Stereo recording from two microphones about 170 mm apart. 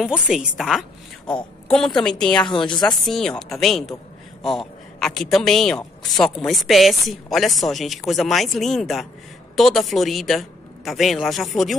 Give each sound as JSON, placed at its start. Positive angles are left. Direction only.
{"t": 0.0, "sound": "a woman's voice", "side_deg": -5}
{"t": 2.4, "sound": "a woman's voice", "side_deg": 25}
{"t": 3.1, "sound": "a woman's voice", "side_deg": 5}